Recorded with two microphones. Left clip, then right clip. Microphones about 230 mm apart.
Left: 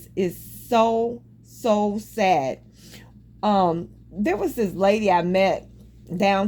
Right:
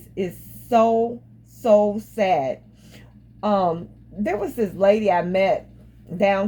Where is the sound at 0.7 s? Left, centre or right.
Left.